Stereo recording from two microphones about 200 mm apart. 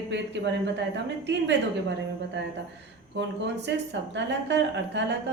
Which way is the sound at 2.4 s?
60° right (ahead or behind).